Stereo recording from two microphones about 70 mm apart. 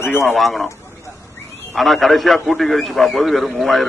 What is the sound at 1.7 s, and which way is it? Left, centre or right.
A man's voice, centre.